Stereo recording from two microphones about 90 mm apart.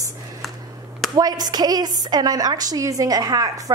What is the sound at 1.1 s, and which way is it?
A woman's voice, 45° right (ahead or behind).